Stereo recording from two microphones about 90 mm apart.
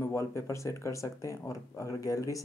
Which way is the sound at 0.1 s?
35° left (ahead or behind).